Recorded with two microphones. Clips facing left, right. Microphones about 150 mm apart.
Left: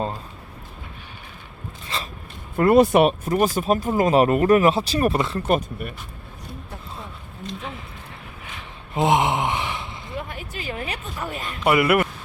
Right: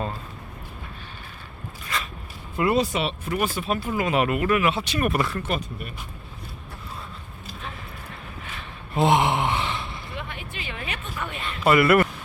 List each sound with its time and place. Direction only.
1.9 s dog: 30° left (ahead or behind)
2.6 s speech: 50° left (ahead or behind)
3.2 s speech: 40° left (ahead or behind)
5.1 s speech: 25° left (ahead or behind)
5.4 s speech: 45° left (ahead or behind)
8.5 s gasp: 15° left (ahead or behind)
10.2 s a sound: 40° left (ahead or behind)
11.6 s speech: 15° left (ahead or behind)